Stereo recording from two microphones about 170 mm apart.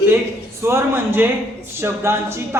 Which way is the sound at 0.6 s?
15° right (ahead or behind).